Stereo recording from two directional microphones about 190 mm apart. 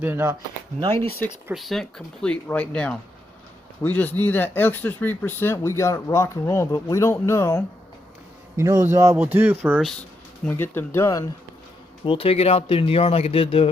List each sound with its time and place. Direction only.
0.0 s speech: 10° right (ahead or behind)
1.5 s speech: centre (ahead or behind)
8.5 s speech: 15° right (ahead or behind)
10.4 s speech: 10° left (ahead or behind)
12.0 s speech: 30° left (ahead or behind)